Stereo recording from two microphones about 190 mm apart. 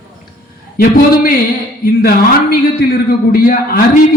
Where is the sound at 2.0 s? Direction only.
50° left (ahead or behind).